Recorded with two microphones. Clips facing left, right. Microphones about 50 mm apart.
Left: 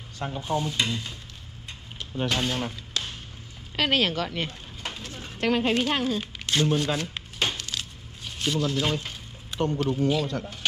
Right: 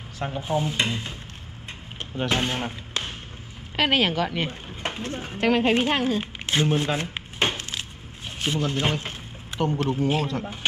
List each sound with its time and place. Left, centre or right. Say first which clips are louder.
0.4 s speech: right 2 dB; centre
2.2 s speech: right 2 dB; right
3.7 s speech: right 2 dB; centre; by 5.3 s right
5.3 s speech: right 3 dB; centre
5.6 s a sound: right 3 dB; right
8.4 s speech: even; right